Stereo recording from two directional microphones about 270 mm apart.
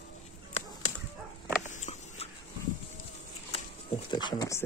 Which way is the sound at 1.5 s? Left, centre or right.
Left.